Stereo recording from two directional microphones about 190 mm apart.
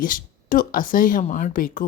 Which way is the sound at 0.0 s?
45° left (ahead or behind).